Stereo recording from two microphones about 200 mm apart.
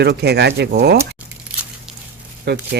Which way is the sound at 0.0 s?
55° right (ahead or behind).